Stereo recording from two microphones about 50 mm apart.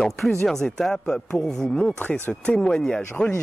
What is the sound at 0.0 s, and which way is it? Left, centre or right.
Speech, centre.